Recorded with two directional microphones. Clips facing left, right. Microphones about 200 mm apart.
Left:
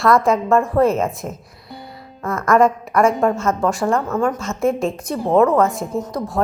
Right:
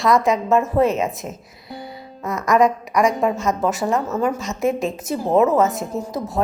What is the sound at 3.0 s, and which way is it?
A woman's voice, centre (ahead or behind).